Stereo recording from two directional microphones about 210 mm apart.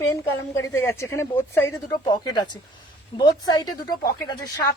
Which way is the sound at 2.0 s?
20° left (ahead or behind).